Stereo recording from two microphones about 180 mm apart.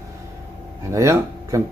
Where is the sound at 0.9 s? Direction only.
15° right (ahead or behind).